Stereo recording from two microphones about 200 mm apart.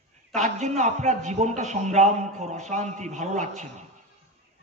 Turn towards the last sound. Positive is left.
turn(degrees=-35)  # may be behind; listen again after turning